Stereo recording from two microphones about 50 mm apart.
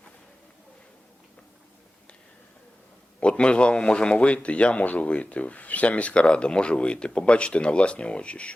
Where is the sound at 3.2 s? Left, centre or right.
Left.